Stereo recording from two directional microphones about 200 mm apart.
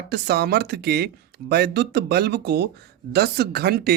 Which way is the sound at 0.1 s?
55° right (ahead or behind).